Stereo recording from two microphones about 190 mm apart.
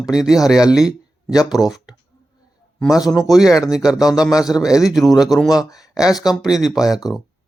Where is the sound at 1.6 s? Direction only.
Centre (ahead or behind).